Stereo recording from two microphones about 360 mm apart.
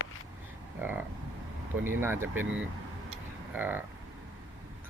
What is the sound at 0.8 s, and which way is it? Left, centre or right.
Speech, centre.